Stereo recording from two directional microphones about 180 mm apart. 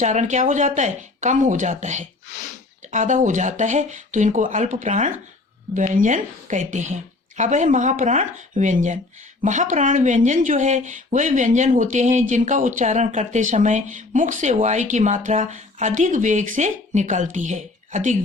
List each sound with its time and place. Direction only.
0.0 s speech: 40° right (ahead or behind)